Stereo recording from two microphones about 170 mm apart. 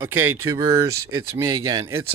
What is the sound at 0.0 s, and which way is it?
Speech, 15° right (ahead or behind).